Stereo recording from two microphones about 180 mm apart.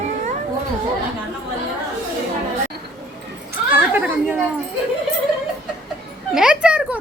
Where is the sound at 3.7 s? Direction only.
10° right (ahead or behind).